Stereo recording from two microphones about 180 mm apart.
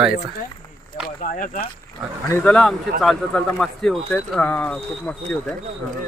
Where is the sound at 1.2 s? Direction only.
50° left (ahead or behind).